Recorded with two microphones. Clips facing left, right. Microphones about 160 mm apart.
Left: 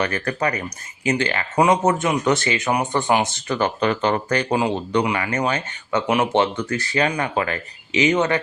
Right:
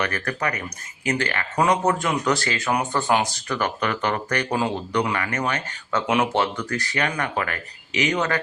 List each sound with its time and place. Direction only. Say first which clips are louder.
0.0 s speech: left 3 dB; 25° left (ahead or behind)
5.9 s speech: left 2 dB; 10° left (ahead or behind)
6.3 s speech: left 4 dB; 20° left (ahead or behind)